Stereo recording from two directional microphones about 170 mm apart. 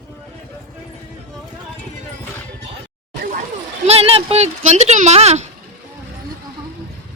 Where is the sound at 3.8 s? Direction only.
35° right (ahead or behind).